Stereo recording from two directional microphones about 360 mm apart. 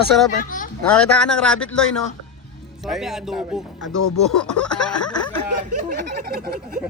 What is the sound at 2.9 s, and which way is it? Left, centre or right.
Speech, centre.